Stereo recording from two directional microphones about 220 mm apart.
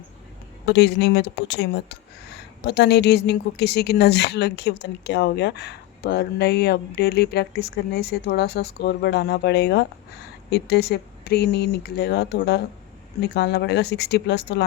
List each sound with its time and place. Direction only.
0.6 s speech: 50° left (ahead or behind)